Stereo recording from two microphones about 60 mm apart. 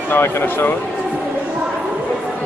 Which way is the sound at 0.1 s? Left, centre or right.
Left.